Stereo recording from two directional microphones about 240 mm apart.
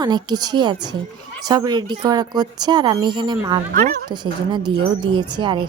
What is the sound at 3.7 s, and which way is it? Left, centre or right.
Speech, right.